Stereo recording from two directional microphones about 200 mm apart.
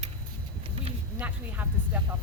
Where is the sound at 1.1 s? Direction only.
5° right (ahead or behind).